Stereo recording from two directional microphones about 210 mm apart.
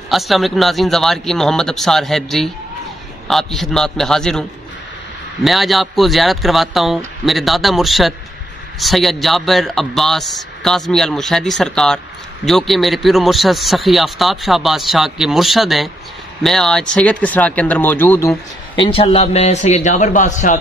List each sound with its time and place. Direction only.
0.1 s a man's voice: centre (ahead or behind)
18.8 s a man's voice: 25° left (ahead or behind)